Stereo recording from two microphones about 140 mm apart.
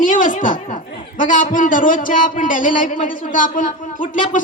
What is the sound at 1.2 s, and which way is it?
A man's voice, 70° left (ahead or behind).